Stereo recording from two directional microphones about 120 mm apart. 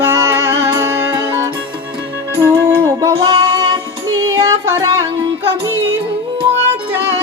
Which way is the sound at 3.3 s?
45° right (ahead or behind).